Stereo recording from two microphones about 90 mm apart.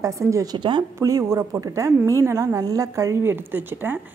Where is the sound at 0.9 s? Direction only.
35° right (ahead or behind).